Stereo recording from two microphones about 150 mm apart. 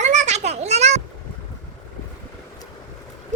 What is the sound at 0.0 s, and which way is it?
Children playing, 50° right (ahead or behind).